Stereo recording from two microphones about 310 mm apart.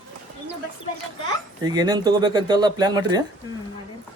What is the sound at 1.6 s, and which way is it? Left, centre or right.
Speech, centre.